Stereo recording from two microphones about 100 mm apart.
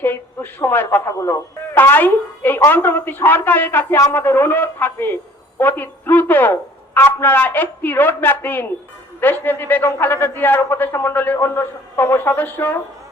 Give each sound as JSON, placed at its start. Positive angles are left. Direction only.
{"t": 0.6, "sound": "a man's voice", "side_deg": 20}
{"t": 1.8, "sound": "a man's voice", "side_deg": 20}